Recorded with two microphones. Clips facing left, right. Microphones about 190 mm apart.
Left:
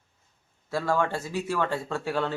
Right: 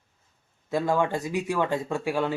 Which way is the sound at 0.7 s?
20° right (ahead or behind).